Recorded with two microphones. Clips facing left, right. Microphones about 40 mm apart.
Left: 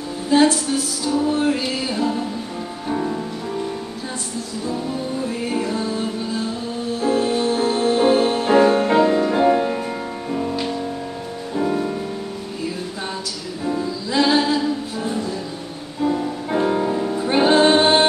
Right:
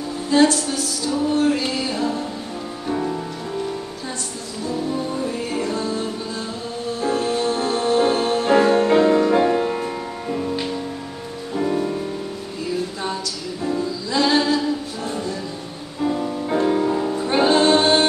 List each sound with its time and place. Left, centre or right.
0.3 s music: centre
2.9 s music: centre
5.6 s music: centre
8.9 s music: centre
11.5 s music: centre
13.7 s music: centre
16.0 s music: centre
17.5 s music: left